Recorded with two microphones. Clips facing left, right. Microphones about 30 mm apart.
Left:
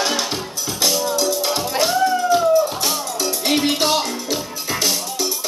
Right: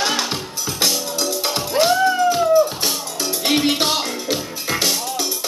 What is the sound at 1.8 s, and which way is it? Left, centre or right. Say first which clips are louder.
Music: right 4 dB; centre.